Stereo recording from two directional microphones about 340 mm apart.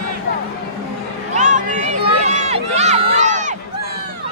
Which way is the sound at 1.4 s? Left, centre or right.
Right.